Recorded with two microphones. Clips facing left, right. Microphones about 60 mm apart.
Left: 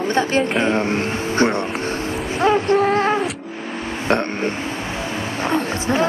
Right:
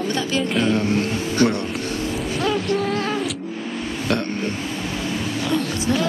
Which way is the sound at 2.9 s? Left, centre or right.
Left.